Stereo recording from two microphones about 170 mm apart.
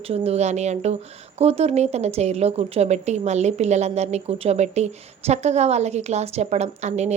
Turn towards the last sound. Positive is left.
turn(degrees=-40)  # may be behind; listen again after turning